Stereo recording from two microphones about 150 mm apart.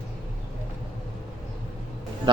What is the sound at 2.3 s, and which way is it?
Speech, 30° right (ahead or behind).